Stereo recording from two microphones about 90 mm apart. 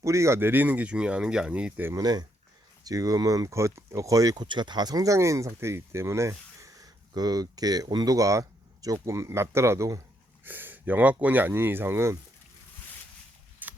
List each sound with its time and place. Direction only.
0.0 s speech: 35° right (ahead or behind); by 1.9 s 15° right (ahead or behind)
2.0 s speech: 45° right (ahead or behind)
4.4 s speech: 55° right (ahead or behind); by 6.8 s 35° right (ahead or behind)
7.1 s speech: 45° right (ahead or behind)
10.4 s speech: 20° right (ahead or behind)
13.6 s a sound: 20° right (ahead or behind)